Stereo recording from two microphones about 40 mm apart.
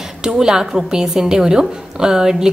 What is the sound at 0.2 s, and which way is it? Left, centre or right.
A woman's voice, centre.